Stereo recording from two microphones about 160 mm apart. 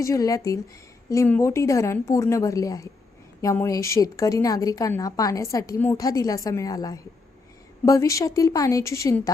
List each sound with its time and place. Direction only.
0.0 s a woman's voice: 20° left (ahead or behind)